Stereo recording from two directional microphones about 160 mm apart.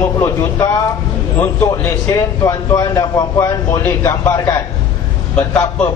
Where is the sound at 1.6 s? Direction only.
10° left (ahead or behind).